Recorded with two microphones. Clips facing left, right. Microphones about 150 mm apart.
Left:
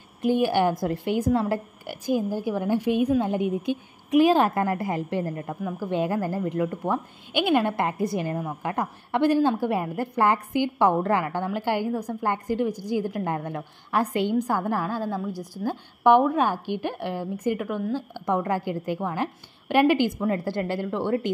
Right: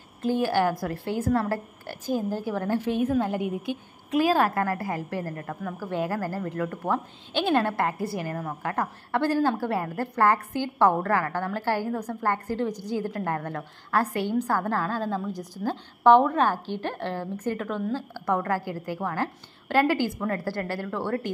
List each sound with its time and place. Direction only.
0.2 s a woman's voice: 15° left (ahead or behind)